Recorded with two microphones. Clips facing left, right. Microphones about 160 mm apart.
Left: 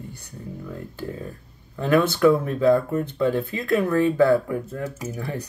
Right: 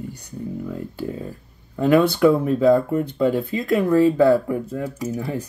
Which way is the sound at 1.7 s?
20° right (ahead or behind).